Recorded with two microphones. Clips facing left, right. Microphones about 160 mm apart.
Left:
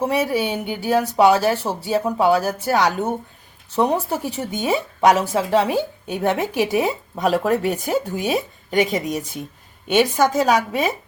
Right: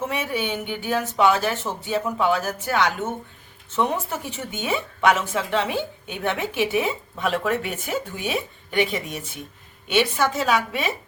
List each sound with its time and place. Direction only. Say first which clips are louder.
0.0 s a woman's voice: left 6 dB; 35° left (ahead or behind)